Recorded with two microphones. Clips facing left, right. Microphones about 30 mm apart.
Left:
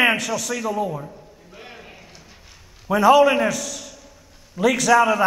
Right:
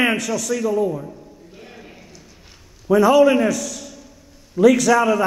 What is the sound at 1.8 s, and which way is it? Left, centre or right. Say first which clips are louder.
Clip-clop: right 1 dB; centre.